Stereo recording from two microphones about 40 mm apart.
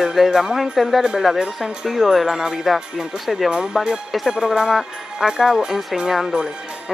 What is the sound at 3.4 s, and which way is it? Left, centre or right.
Speech, right.